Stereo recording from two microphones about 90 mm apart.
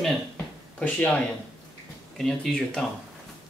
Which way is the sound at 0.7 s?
10° left (ahead or behind).